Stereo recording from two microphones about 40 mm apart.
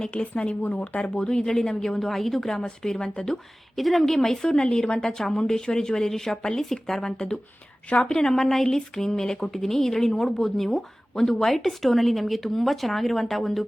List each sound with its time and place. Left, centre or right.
0.1 s a woman's voice: left; by 3.3 s centre
3.8 s a woman's voice: centre; by 6.6 s left
6.6 s a woman's voice: centre
7.9 s a woman's voice: left; by 13.7 s centre